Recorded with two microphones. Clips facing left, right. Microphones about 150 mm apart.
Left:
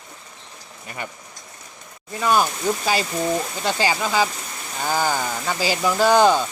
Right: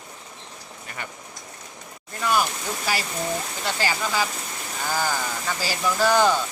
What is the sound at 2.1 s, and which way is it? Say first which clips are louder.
Speech: left 4 dB; 20° left (ahead or behind).